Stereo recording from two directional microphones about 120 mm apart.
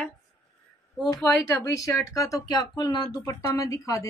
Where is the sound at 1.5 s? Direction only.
25° left (ahead or behind).